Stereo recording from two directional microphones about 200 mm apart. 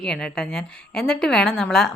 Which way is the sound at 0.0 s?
5° left (ahead or behind).